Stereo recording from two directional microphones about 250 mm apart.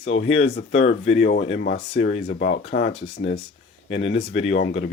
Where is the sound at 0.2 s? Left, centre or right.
Left.